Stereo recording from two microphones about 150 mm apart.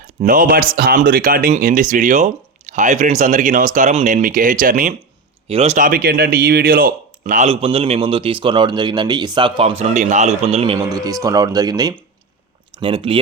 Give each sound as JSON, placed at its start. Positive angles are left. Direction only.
{"t": 0.2, "sound": "speech", "side_deg": -65}
{"t": 5.5, "sound": "speech", "side_deg": -40}
{"t": 5.7, "sound": "speech", "side_deg": -70}
{"t": 7.4, "sound": "a man's voice", "side_deg": -40}
{"t": 10.8, "sound": "speech", "side_deg": -25}
{"t": 12.8, "sound": "a man's voice", "side_deg": -35}